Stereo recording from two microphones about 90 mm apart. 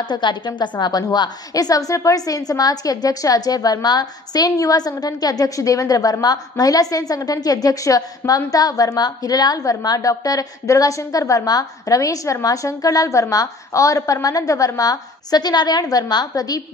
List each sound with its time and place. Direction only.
0.0 s a woman's voice: 55° left (ahead or behind)